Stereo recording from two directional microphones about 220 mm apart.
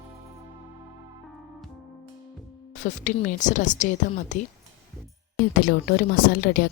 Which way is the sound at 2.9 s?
35° left (ahead or behind).